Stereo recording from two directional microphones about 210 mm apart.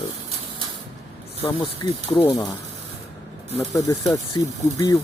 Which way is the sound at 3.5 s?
15° left (ahead or behind).